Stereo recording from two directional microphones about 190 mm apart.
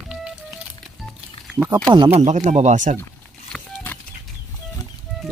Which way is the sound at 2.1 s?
35° right (ahead or behind).